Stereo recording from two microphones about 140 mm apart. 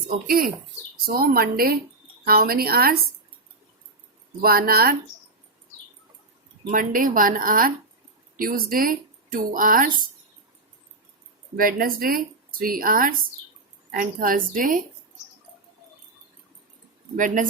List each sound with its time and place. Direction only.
0.3 s speech: 90° right
4.4 s speech: 90° right
6.7 s speech: 75° right (ahead or behind)
11.5 s a woman's voice: 90° right; by 14.8 s 75° right (ahead or behind)
17.2 s a woman's voice: 70° right (ahead or behind)